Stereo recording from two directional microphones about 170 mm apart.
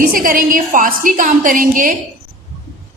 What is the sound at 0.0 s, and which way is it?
A woman's voice, 55° right (ahead or behind).